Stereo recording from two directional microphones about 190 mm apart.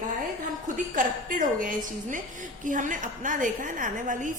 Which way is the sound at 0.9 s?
45° right (ahead or behind).